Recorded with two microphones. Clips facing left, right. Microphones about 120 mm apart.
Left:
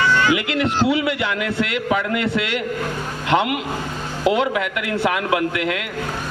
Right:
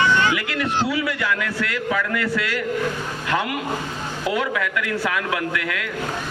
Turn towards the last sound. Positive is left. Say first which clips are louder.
# left 4 dB
turn(degrees=25)  # may be behind; listen again after turning